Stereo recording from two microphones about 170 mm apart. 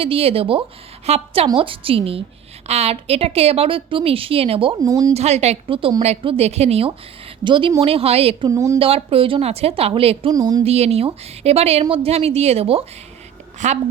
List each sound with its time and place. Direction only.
0.0 s speech: 35° right (ahead or behind)
4.8 s speech: 20° right (ahead or behind)
5.1 s speech: 40° right (ahead or behind)
8.4 s speech: 20° right (ahead or behind)
8.8 s speech: 35° right (ahead or behind)
10.3 s speech: 20° right (ahead or behind)
10.6 s a woman's voice: 40° right (ahead or behind)